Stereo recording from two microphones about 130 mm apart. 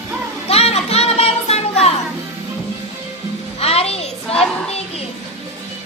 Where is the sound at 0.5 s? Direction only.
55° left (ahead or behind).